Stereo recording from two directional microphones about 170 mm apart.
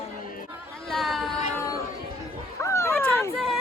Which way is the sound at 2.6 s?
15° left (ahead or behind).